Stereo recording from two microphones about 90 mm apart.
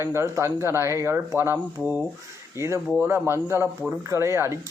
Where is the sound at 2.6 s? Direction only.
30° right (ahead or behind).